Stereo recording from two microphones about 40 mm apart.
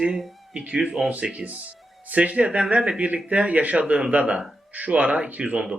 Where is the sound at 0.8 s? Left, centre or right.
Centre.